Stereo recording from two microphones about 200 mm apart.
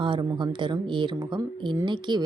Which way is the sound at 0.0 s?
25° right (ahead or behind).